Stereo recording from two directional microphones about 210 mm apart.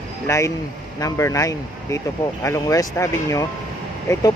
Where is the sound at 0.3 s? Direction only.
15° left (ahead or behind).